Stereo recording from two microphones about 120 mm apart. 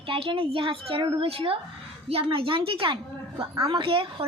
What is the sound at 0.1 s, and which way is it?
A woman's voice, 50° right (ahead or behind).